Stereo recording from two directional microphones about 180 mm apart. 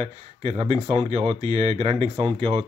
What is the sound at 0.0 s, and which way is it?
Speech, 35° right (ahead or behind).